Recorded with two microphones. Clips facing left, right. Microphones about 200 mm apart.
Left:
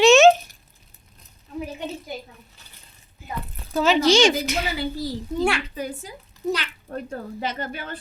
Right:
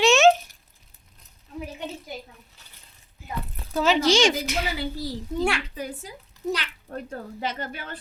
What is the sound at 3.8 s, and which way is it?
Speech, 25° left (ahead or behind).